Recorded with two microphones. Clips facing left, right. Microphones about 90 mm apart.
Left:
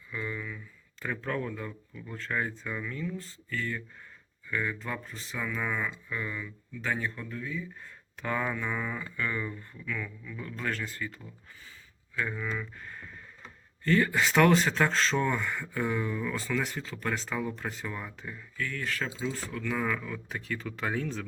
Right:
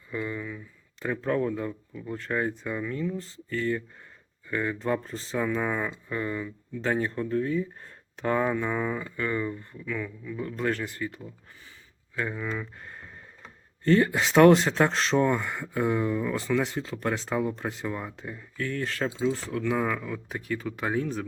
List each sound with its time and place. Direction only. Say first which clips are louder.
0.1 s speech: right 4 dB; 20° right (ahead or behind); by 7.9 s 45° right (ahead or behind)
8.2 s speech: right 6 dB; 25° right (ahead or behind)
12.5 s a sound: right 2 dB; 25° right (ahead or behind)
13.8 s speech: right 3 dB; 25° right (ahead or behind)
18.5 s speech: right 3 dB; 30° right (ahead or behind)
19.5 s speech: right 4 dB; 20° right (ahead or behind)